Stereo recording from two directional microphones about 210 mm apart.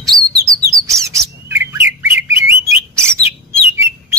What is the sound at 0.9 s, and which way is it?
Bird, 15° right (ahead or behind).